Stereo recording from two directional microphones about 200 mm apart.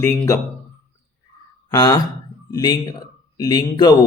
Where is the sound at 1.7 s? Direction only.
20° left (ahead or behind).